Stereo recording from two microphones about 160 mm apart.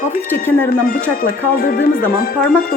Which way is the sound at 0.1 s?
10° left (ahead or behind).